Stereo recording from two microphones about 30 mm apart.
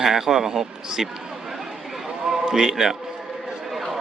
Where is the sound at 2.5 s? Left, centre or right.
Centre.